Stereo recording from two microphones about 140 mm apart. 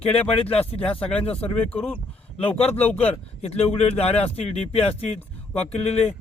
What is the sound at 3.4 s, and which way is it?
Speech, 45° left (ahead or behind).